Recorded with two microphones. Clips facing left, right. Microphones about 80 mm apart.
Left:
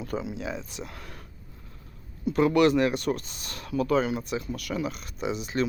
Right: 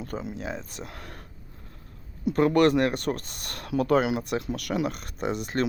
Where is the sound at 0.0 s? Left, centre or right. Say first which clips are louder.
Left 1 dB; right.